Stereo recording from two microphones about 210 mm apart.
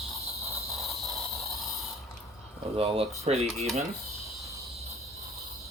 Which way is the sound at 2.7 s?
25° right (ahead or behind).